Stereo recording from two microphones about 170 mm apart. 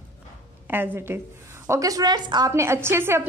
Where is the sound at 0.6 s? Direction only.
10° right (ahead or behind).